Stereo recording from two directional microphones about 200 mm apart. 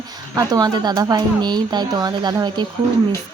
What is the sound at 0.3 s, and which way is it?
Speech, 20° right (ahead or behind).